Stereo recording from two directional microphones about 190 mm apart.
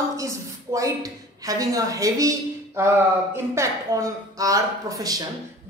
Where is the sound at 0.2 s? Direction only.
15° right (ahead or behind).